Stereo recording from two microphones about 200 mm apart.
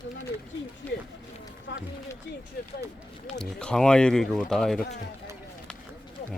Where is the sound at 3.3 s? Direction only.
5° left (ahead or behind).